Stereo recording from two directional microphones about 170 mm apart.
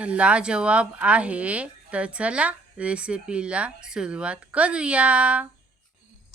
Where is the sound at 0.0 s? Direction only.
5° right (ahead or behind).